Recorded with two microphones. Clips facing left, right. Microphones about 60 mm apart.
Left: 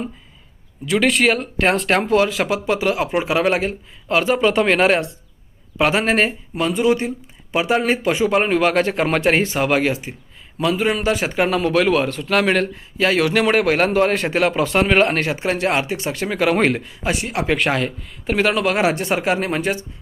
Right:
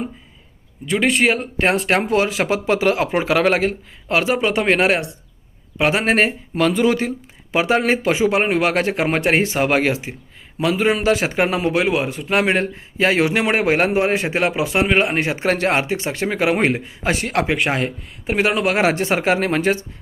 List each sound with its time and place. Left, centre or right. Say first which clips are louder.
0.9 s speech: left 1 dB; centre
1.9 s speech: left 1 dB; right
4.2 s speech: left 3 dB; centre
6.0 s speech: right 1 dB; right
6.6 s speech: right 1 dB; right
7.5 s speech: right 1 dB; right
11.2 s a man's voice: even; right
11.7 s a man's voice: left 2 dB; centre
15.2 s a man's voice: even; right
15.4 s a man's voice: right 2 dB; right
17.0 s speech: right 2 dB; right
17.4 s speech: left 1 dB; centre
18.6 s speech: right 1 dB; right